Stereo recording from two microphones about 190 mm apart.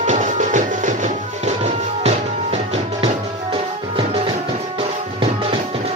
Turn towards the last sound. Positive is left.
turn(degrees=-25)  # may be behind; listen again after turning